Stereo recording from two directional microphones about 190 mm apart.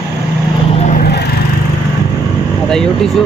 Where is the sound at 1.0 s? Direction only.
60° left (ahead or behind).